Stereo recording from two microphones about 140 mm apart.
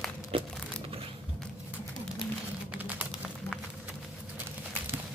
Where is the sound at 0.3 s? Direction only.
45° right (ahead or behind).